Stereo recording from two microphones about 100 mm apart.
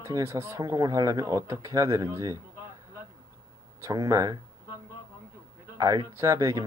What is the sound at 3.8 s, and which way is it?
Speech, 35° right (ahead or behind).